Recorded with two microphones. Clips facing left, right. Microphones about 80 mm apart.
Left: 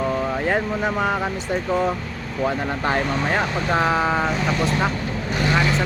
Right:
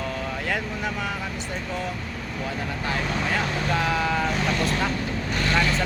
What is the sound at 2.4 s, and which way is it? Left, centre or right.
Speech, left.